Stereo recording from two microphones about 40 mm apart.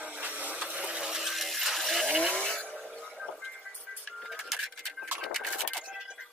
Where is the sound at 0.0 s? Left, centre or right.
Right.